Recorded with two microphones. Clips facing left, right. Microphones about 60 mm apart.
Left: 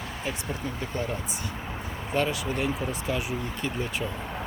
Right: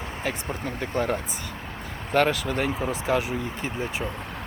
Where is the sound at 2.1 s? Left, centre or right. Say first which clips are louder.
Right 5 dB; right.